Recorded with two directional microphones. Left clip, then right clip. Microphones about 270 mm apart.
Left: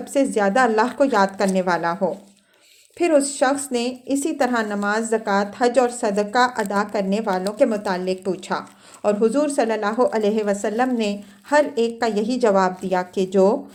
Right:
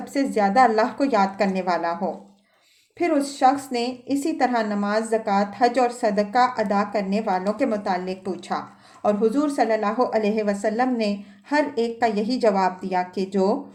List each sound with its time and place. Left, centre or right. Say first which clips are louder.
0.0 s a woman's voice: left 3 dB; left
3.0 s a woman's voice: left 2 dB; left